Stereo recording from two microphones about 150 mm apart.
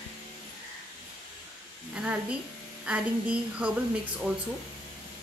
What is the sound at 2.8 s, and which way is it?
Speech, 10° right (ahead or behind).